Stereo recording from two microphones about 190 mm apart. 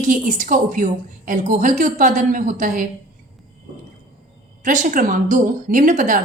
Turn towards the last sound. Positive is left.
turn(degrees=-45)  # may be behind; listen again after turning